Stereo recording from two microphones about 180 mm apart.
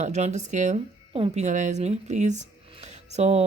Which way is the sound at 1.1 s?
30° right (ahead or behind).